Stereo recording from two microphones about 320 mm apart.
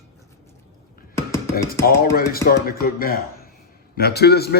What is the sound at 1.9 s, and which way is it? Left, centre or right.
A man's voice, left.